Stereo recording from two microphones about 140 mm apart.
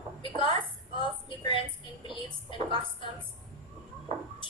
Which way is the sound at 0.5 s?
35° left (ahead or behind).